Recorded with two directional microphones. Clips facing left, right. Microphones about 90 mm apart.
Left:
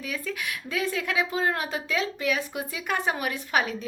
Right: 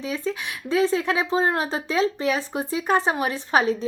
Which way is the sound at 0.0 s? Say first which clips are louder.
Right 5 dB; 25° right (ahead or behind).